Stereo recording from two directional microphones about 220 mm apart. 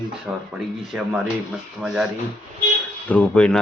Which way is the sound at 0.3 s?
Centre (ahead or behind).